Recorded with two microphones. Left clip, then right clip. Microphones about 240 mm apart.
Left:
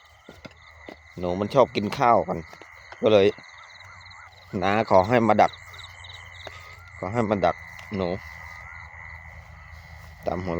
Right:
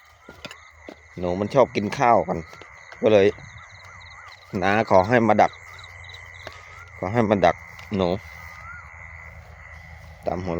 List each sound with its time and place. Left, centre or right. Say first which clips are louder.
1.1 s speech: right 1 dB; centre
4.5 s speech: right 2 dB; centre
7.0 s speech: right 4 dB; centre
10.2 s speech: right 1 dB; centre